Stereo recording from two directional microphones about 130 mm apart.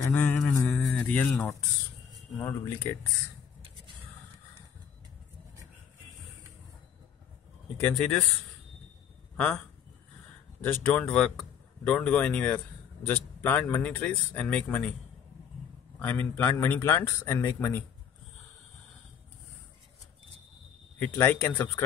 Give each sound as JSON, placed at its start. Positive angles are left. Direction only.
{"t": 0.0, "sound": "mantra", "side_deg": 15}
{"t": 0.5, "sound": "a sound", "side_deg": 15}
{"t": 2.4, "sound": "a man's voice", "side_deg": 15}
{"t": 7.8, "sound": "a man's voice", "side_deg": 10}
{"t": 10.6, "sound": "a man's voice", "side_deg": 10}
{"t": 16.0, "sound": "a man's voice", "side_deg": 15}
{"t": 21.0, "sound": "a man's voice", "side_deg": 15}